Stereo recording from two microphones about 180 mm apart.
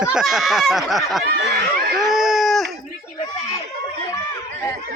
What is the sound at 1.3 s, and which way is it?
Speech, 60° right (ahead or behind).